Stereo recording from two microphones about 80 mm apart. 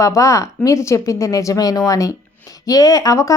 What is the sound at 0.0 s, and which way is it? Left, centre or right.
Speech, left.